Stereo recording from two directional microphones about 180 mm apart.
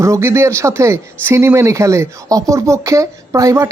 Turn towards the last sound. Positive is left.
turn(degrees=-15)  # may be behind; listen again after turning